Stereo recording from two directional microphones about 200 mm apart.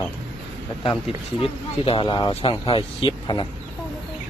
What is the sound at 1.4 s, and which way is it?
Speech, 25° left (ahead or behind).